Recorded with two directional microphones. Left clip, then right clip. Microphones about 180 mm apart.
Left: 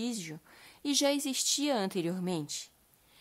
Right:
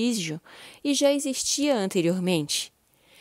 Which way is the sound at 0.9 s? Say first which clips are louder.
Right 7 dB; 30° right (ahead or behind).